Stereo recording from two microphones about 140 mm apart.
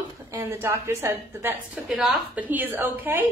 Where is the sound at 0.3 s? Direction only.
20° right (ahead or behind).